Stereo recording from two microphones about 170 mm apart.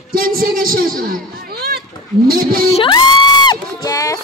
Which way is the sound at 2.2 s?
60° right (ahead or behind).